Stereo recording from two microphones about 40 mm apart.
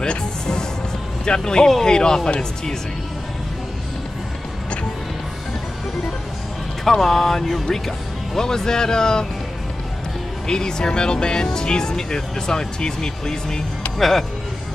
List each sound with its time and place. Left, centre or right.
0.0 s music: centre
1.2 s speech: centre
6.8 s speech: centre
10.4 s speech: centre
13.9 s speech: centre